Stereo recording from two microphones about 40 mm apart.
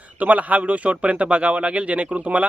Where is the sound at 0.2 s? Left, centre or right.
Right.